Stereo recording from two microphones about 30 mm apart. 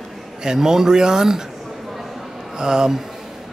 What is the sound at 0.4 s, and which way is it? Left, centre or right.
A man's voice, right.